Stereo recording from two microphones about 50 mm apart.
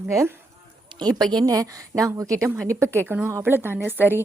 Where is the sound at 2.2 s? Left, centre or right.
Right.